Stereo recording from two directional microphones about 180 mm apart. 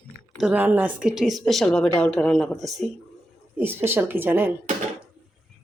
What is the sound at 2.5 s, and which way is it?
Speech, 20° right (ahead or behind).